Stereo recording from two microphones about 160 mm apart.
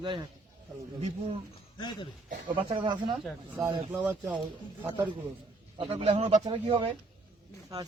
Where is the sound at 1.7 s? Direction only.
25° left (ahead or behind).